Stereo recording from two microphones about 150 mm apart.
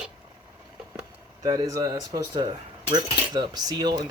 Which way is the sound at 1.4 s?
25° right (ahead or behind).